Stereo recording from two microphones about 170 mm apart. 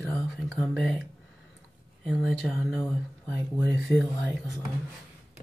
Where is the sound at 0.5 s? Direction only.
Centre (ahead or behind).